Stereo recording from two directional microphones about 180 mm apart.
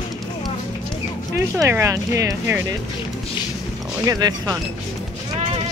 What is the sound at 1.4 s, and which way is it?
Speech, 15° right (ahead or behind).